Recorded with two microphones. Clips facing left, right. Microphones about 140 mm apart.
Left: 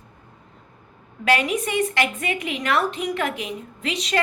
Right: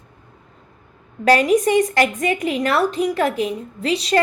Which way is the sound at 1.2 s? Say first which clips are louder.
Right 7 dB; 40° right (ahead or behind).